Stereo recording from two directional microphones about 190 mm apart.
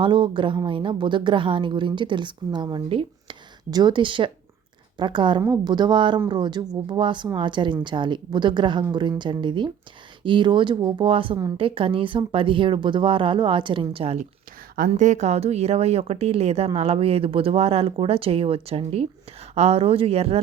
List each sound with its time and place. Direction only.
0.0 s a woman's voice: 25° right (ahead or behind)